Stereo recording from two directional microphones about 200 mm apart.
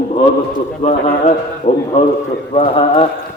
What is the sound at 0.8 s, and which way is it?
A man's voice, 35° left (ahead or behind).